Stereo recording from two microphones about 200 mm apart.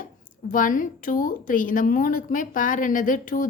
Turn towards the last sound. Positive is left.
turn(degrees=40)  # may be behind; listen again after turning